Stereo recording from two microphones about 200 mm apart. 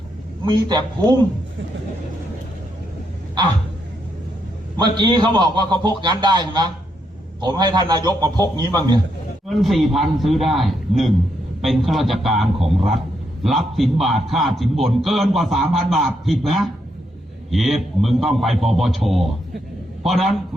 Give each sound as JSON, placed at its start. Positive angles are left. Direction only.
{"t": 0.4, "sound": "a man's voice", "side_deg": -20}
{"t": 4.8, "sound": "a man's voice", "side_deg": -20}
{"t": 9.6, "sound": "a man's voice", "side_deg": 0}